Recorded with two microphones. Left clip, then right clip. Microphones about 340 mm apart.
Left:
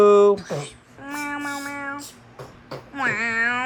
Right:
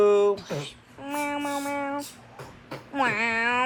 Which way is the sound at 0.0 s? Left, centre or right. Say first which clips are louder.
Left 6 dB; left.